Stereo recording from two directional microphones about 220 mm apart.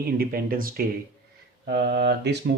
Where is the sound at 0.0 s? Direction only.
40° right (ahead or behind).